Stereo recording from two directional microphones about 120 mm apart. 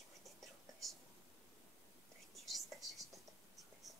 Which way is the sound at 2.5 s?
Centre (ahead or behind).